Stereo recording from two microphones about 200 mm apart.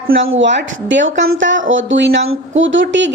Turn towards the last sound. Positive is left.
turn(degrees=-65)  # may be behind; listen again after turning